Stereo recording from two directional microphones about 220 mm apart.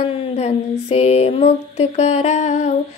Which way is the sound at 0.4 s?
30° left (ahead or behind).